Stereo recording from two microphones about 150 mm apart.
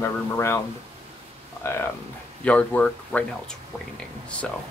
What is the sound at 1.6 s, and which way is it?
Speech, 15° left (ahead or behind).